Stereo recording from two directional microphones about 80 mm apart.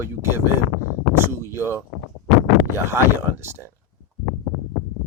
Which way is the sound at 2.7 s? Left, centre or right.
Right.